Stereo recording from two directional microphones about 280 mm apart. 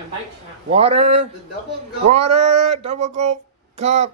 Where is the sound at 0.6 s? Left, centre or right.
Right.